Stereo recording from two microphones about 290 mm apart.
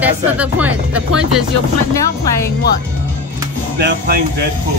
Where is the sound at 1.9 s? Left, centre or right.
Centre.